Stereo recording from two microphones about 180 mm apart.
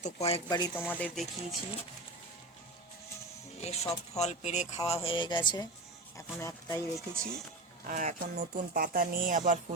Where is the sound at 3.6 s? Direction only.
35° left (ahead or behind); by 7.0 s 15° left (ahead or behind).